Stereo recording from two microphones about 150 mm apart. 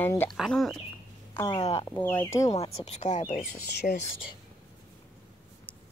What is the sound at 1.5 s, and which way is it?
Speech, 40° left (ahead or behind).